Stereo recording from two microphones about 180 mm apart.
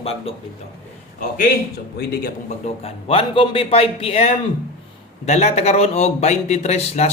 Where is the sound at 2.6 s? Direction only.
30° left (ahead or behind).